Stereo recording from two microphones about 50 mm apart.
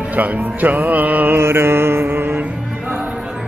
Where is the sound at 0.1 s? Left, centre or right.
Right.